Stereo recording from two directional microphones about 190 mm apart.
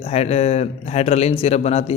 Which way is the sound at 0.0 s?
35° left (ahead or behind).